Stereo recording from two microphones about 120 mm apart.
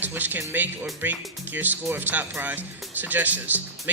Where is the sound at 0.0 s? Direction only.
15° right (ahead or behind).